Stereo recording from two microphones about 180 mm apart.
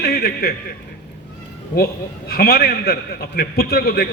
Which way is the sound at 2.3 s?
60° left (ahead or behind).